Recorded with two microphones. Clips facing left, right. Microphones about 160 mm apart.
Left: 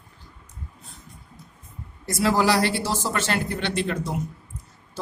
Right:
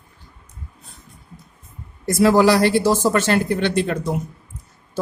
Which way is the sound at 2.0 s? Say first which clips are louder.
Right 7 dB; 50° right (ahead or behind).